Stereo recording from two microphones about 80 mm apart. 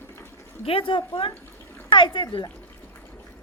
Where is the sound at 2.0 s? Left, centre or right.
Left.